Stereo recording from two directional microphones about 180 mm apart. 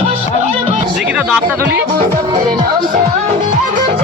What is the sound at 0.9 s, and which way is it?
Speech, 10° right (ahead or behind).